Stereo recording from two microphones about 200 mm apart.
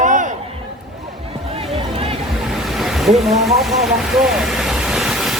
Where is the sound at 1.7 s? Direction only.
30° right (ahead or behind).